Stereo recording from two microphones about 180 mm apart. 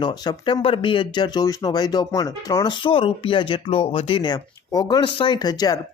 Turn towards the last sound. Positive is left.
turn(degrees=20)  # may be behind; listen again after turning